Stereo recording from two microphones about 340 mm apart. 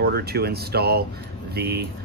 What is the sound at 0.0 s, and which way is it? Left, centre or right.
Speech, right.